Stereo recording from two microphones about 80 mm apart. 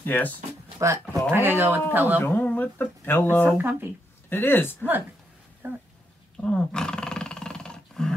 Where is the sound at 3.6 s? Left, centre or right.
Right.